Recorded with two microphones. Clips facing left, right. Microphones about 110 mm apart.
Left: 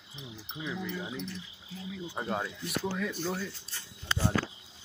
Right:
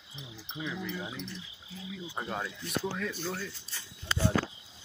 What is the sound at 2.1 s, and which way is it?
Speech, 15° left (ahead or behind).